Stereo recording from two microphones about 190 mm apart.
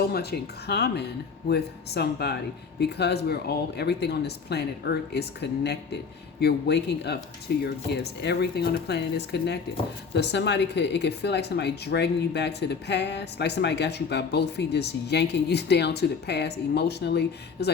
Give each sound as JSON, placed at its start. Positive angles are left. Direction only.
{"t": 0.1, "sound": "speech", "side_deg": 55}